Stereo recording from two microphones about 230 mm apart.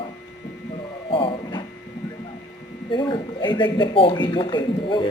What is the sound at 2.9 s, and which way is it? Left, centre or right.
Speech, left.